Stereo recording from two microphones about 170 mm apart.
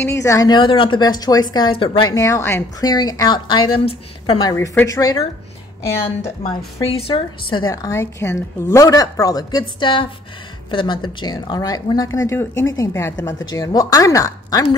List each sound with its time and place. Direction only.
0.0 s a woman's voice: 15° left (ahead or behind)
4.5 s a woman's voice: 15° left (ahead or behind)
5.9 s a woman's voice: 35° left (ahead or behind); by 14.7 s 20° left (ahead or behind)